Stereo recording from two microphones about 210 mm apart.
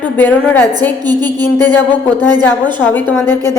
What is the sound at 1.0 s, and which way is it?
Speech, 20° right (ahead or behind).